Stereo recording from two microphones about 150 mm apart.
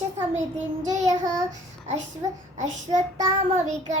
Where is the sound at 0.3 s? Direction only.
55° right (ahead or behind).